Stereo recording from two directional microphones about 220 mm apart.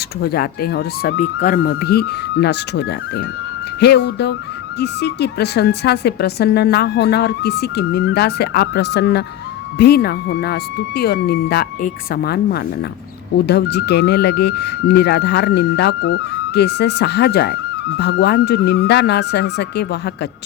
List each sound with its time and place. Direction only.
0.2 s speech: 45° left (ahead or behind)